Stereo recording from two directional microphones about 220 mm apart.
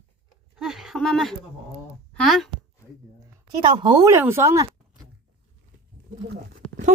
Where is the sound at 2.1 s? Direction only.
Centre (ahead or behind).